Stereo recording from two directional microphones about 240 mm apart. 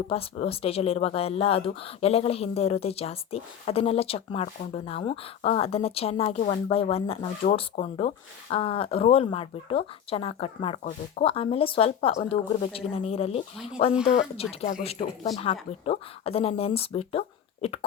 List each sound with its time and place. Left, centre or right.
0.1 s a woman's voice: left